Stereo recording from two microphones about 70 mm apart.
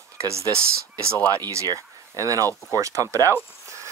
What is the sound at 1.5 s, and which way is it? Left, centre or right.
Speech, right.